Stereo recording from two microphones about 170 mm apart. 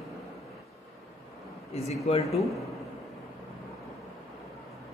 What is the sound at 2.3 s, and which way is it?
Speech, centre (ahead or behind).